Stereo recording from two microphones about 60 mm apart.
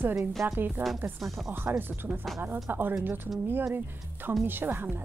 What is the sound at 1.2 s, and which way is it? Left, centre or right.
Speech, centre.